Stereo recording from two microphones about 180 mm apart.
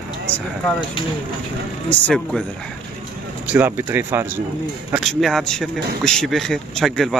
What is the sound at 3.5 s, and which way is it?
Speech, 10° right (ahead or behind).